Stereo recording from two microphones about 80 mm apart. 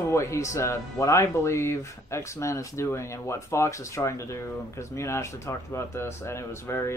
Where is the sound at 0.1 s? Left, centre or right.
Left.